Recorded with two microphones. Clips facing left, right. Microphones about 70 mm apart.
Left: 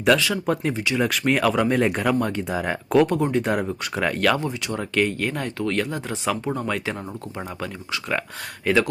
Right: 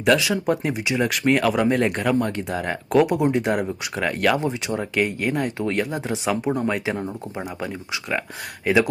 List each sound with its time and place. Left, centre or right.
0.2 s speech: centre
4.4 s speech: right
4.8 s speech: centre
8.6 s speech: centre